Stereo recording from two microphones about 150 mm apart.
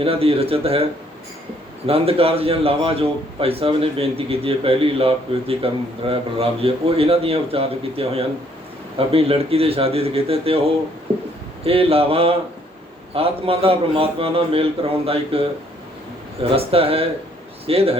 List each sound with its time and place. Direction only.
0.0 s a man's voice: 40° right (ahead or behind)
1.9 s a man's voice: 40° right (ahead or behind)